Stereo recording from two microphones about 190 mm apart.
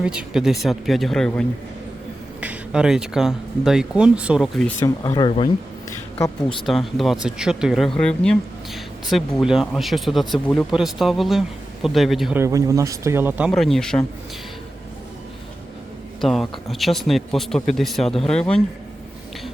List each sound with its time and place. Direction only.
0.0 s speech: 5° right (ahead or behind)
4.8 s speech: 20° left (ahead or behind)
6.7 s speech: centre (ahead or behind)
12.4 s speech: 15° right (ahead or behind)
13.5 s speech: centre (ahead or behind)
16.2 s speech: centre (ahead or behind)